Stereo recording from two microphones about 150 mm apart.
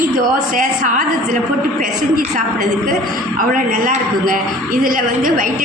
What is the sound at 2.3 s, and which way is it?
A man's voice, 60° right (ahead or behind).